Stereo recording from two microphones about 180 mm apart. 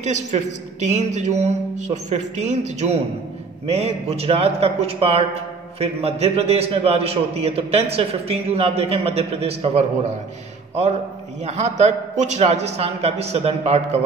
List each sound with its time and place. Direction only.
0.0 s a woman's voice: 40° right (ahead or behind)
11.4 s a woman's voice: 40° right (ahead or behind)